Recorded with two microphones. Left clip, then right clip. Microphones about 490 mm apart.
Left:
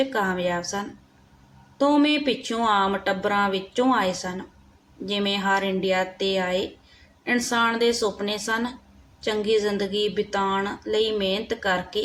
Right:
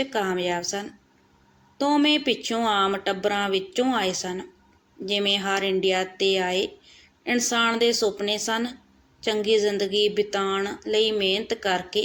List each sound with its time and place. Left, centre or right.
0.0 s speech: left